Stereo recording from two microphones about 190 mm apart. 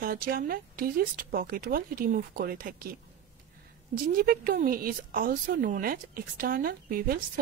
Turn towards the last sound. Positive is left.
turn(degrees=-50)  # may be behind; listen again after turning